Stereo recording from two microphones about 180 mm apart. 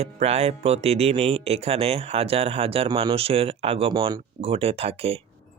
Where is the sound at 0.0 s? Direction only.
35° right (ahead or behind).